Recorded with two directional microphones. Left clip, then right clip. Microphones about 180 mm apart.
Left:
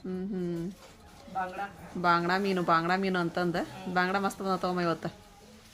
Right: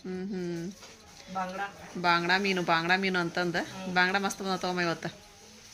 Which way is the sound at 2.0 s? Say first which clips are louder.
Right 1 dB; 15° left (ahead or behind).